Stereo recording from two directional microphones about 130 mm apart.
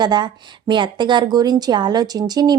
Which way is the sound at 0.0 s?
35° right (ahead or behind).